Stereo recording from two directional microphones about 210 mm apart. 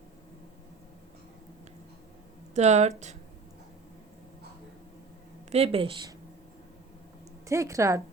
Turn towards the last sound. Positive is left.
turn(degrees=-15)  # may be behind; listen again after turning